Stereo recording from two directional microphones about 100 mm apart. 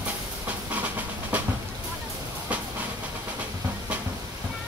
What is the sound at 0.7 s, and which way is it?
Train, 15° right (ahead or behind).